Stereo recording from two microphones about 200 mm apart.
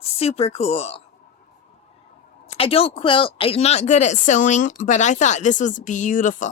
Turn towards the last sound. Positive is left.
turn(degrees=40)  # may be behind; listen again after turning